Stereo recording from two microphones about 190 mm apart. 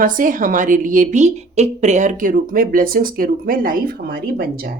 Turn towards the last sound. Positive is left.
turn(degrees=-50)  # may be behind; listen again after turning